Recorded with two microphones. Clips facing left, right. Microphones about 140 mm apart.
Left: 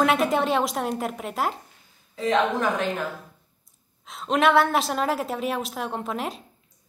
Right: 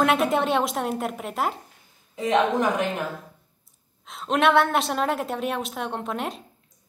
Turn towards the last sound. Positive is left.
turn(degrees=0)  # may be behind; listen again after turning